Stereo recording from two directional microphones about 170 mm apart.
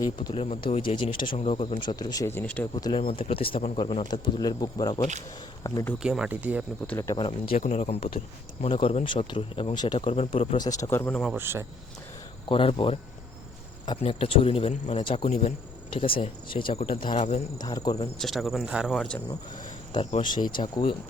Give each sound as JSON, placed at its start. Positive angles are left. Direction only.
{"t": 0.0, "sound": "speech", "side_deg": 25}
{"t": 0.3, "sound": "speech", "side_deg": 40}
{"t": 3.0, "sound": "speech", "side_deg": 55}
{"t": 3.2, "sound": "speech", "side_deg": 30}
{"t": 6.0, "sound": "speech", "side_deg": -5}
{"t": 6.8, "sound": "speech", "side_deg": 15}
{"t": 7.5, "sound": "speech", "side_deg": 40}
{"t": 10.6, "sound": "speech", "side_deg": 20}
{"t": 11.3, "sound": "speech", "side_deg": -15}
{"t": 12.5, "sound": "speech", "side_deg": 30}
{"t": 17.6, "sound": "speech", "side_deg": 25}
{"t": 18.2, "sound": "speech", "side_deg": 0}
{"t": 20.1, "sound": "speech", "side_deg": 45}
{"t": 20.6, "sound": "speech", "side_deg": 25}